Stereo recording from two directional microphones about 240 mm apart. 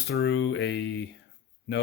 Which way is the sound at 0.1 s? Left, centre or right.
Left.